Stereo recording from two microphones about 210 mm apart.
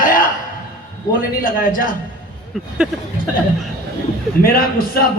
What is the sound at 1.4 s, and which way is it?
Speech, 40° left (ahead or behind).